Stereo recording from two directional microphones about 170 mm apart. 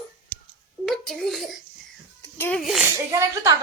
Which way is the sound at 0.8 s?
Centre (ahead or behind).